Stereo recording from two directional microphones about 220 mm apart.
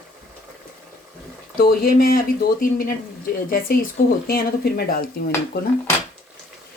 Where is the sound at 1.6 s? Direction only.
45° left (ahead or behind).